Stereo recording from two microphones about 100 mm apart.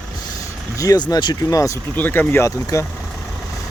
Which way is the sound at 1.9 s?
20° left (ahead or behind).